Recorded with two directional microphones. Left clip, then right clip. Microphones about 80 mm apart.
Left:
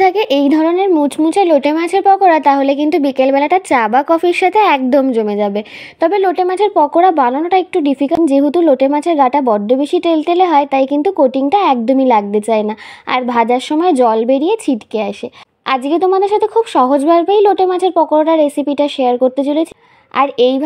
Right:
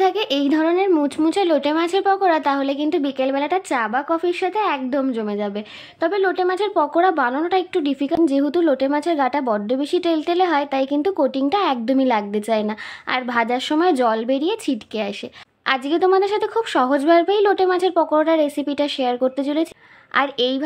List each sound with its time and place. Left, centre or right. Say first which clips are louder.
0.0 s speech: left 8 dB; left
1.2 s speech: left 9 dB; left
1.6 s a woman's voice: left 6 dB; left
5.9 s speech: left 7 dB; left
11.8 s speech: left 8 dB; left
13.1 s speech: left 8 dB; left
13.7 s speech: left 6 dB; left
16.0 s a woman's voice: left 5 dB; left
20.2 s speech: left 8 dB; left